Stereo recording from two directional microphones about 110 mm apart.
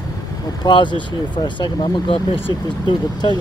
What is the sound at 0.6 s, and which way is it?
Speech, 45° left (ahead or behind).